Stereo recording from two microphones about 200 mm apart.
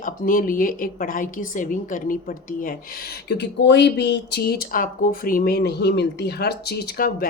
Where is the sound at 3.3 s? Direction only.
60° left (ahead or behind).